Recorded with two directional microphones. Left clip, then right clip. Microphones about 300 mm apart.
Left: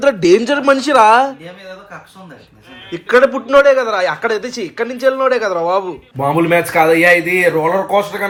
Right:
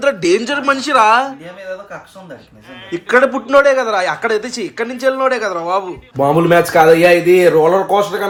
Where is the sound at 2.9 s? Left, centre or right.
Centre.